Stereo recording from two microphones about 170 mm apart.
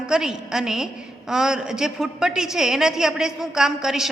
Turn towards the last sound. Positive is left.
turn(degrees=-5)  # may be behind; listen again after turning